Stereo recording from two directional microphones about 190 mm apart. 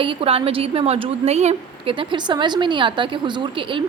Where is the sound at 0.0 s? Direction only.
30° right (ahead or behind).